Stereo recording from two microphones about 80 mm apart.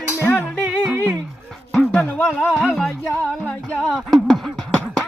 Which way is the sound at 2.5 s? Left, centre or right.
Centre.